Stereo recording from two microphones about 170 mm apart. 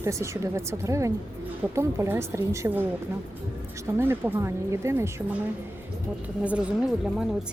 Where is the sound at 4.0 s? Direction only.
10° right (ahead or behind).